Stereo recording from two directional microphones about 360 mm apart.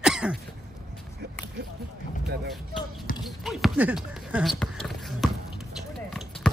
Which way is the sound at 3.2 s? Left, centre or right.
Centre.